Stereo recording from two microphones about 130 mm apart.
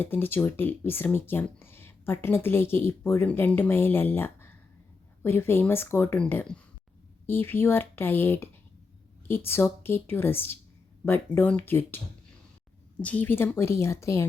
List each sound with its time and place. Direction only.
0.0 s speech: 15° left (ahead or behind)
13.0 s speech: 10° left (ahead or behind)